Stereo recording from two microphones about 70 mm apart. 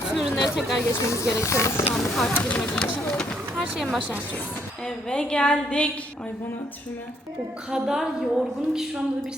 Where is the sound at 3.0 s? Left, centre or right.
Centre.